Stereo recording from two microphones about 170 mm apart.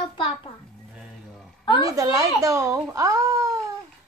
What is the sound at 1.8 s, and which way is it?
Speech, 20° right (ahead or behind).